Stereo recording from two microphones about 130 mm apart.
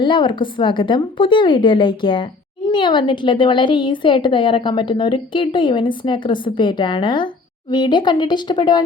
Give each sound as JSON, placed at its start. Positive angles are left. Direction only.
{"t": 0.0, "sound": "a woman's voice", "side_deg": 40}